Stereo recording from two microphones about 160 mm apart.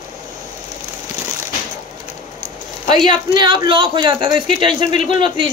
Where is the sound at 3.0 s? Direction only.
30° right (ahead or behind).